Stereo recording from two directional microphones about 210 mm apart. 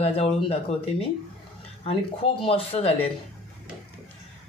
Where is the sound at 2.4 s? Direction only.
25° left (ahead or behind).